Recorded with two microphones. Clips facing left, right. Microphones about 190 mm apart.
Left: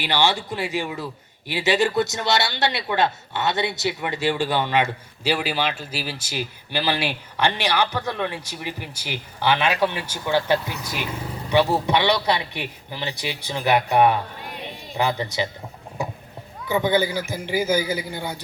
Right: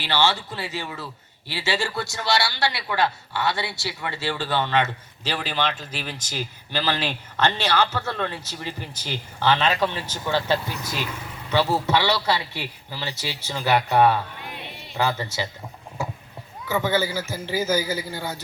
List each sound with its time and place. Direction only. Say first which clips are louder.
0.0 s a man's voice: left 1 dB; 15° left (ahead or behind)
16.6 s a man's voice: left 3 dB; 15° left (ahead or behind)